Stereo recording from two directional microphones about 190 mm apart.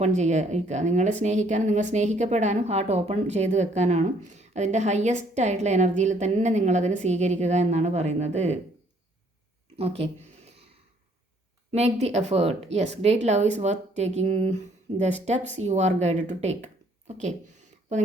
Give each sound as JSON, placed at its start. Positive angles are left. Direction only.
{"t": 0.0, "sound": "speech", "side_deg": -40}
{"t": 9.7, "sound": "a sound", "side_deg": -30}
{"t": 11.7, "sound": "speech", "side_deg": -35}